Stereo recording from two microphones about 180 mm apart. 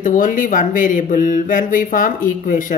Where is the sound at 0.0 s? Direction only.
45° left (ahead or behind).